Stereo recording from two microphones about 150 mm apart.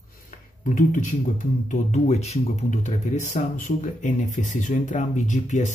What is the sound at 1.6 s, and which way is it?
Speech, 50° left (ahead or behind).